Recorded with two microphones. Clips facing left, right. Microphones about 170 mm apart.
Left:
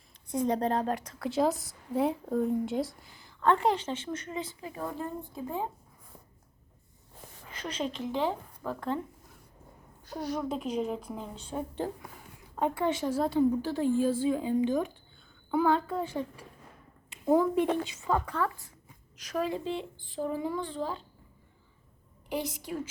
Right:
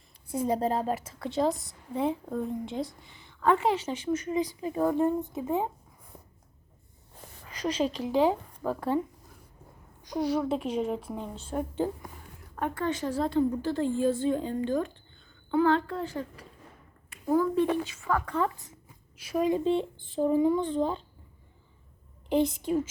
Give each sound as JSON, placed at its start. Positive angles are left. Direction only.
{"t": 0.3, "sound": "a woman's voice", "side_deg": -5}
{"t": 7.6, "sound": "speech", "side_deg": -35}
{"t": 8.0, "sound": "a woman's voice", "side_deg": -10}
{"t": 8.6, "sound": "speech", "side_deg": -35}
{"t": 10.0, "sound": "a woman's voice", "side_deg": -15}
{"t": 12.5, "sound": "a woman's voice", "side_deg": 15}
{"t": 17.2, "sound": "speech", "side_deg": 20}
{"t": 19.1, "sound": "a woman's voice", "side_deg": -10}
{"t": 22.3, "sound": "speech", "side_deg": -25}